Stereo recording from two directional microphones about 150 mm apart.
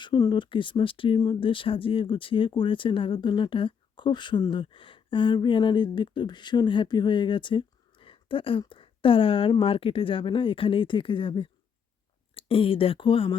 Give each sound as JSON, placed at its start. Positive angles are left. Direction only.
{"t": 0.0, "sound": "speech", "side_deg": 30}